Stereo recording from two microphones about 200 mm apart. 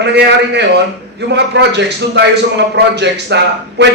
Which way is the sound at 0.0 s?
60° right (ahead or behind).